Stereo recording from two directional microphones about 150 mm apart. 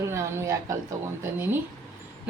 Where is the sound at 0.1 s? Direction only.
20° right (ahead or behind).